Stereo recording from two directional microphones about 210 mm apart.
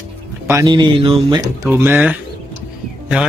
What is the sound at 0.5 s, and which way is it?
Speech, 15° right (ahead or behind).